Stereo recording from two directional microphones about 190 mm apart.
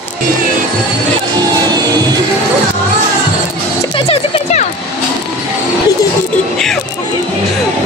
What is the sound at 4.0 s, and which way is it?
Music, 30° left (ahead or behind).